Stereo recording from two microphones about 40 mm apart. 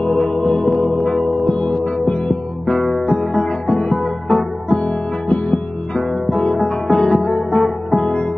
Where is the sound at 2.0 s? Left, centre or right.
Left.